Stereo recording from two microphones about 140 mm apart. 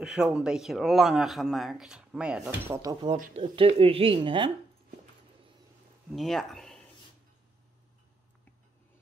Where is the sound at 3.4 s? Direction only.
40° right (ahead or behind).